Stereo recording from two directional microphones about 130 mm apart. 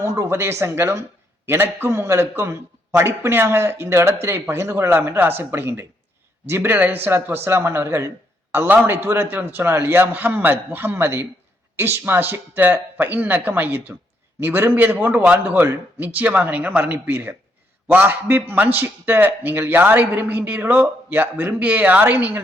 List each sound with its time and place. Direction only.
0.0 s a man's voice: 20° right (ahead or behind)